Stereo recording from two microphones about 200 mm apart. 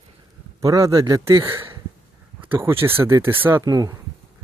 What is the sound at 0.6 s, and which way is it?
Speech, 15° right (ahead or behind).